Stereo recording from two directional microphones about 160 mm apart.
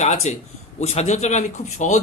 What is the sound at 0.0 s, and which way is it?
A man's voice, 45° left (ahead or behind).